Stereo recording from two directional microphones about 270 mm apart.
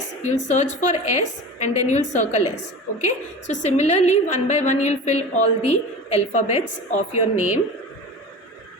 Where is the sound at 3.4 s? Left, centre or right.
Left.